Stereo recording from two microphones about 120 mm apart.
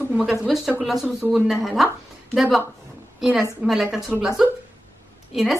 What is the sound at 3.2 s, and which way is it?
Speech, 5° right (ahead or behind).